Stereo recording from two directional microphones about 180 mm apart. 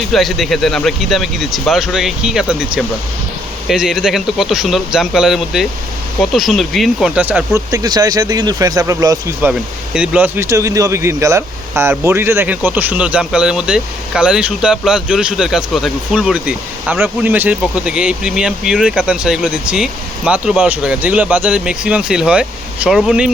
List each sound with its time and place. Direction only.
0.1 s speech: centre (ahead or behind)
3.7 s speech: 5° right (ahead or behind)
9.5 s speech: 5° right (ahead or behind)